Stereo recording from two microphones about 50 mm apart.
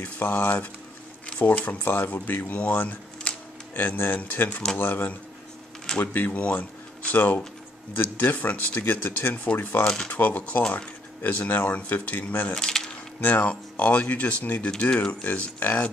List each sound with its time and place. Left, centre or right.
0.0 s speech: left
2.5 s speech: left
3.3 s a sound: left
3.7 s speech: left
12.5 s coin: centre
13.2 s speech: left
15.2 s speech: left